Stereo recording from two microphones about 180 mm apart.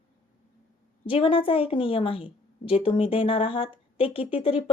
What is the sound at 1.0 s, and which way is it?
A woman's voice, 30° left (ahead or behind).